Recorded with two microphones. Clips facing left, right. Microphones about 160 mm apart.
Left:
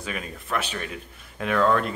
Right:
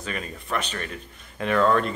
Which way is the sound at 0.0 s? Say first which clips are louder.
Right 1 dB; 5° left (ahead or behind).